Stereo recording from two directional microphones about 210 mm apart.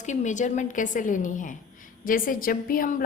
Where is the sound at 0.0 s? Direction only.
35° left (ahead or behind).